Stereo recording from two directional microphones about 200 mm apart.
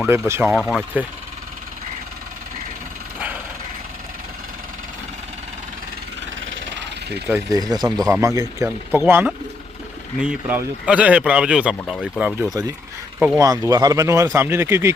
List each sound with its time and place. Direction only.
0.0 s speech: 10° right (ahead or behind)
0.4 s speech: centre (ahead or behind)
6.4 s a sound: 70° right (ahead or behind)
7.3 s speech: 15° right (ahead or behind)
13.4 s speech: 15° right (ahead or behind)